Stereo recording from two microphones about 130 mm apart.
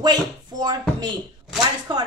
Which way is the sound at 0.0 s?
30° right (ahead or behind).